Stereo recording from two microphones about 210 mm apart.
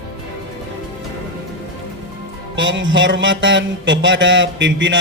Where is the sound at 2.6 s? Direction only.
60° right (ahead or behind).